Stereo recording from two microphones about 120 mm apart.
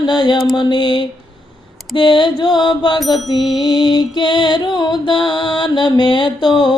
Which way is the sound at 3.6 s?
40° left (ahead or behind).